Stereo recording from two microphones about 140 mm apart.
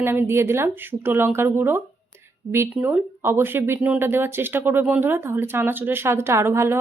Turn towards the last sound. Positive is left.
turn(degrees=-20)  # may be behind; listen again after turning